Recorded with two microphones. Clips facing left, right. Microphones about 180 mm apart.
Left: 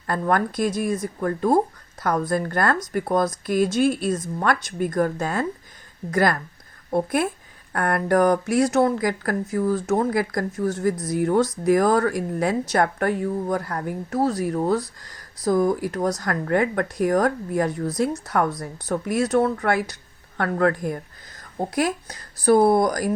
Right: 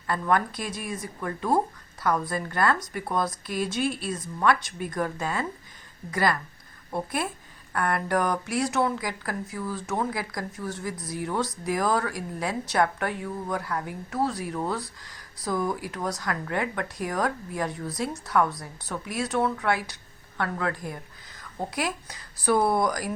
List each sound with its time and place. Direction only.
0.1 s speech: 45° left (ahead or behind)
7.7 s speech: 50° left (ahead or behind)